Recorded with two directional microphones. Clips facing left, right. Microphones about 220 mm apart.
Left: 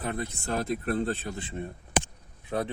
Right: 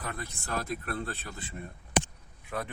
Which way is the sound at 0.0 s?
25° left (ahead or behind).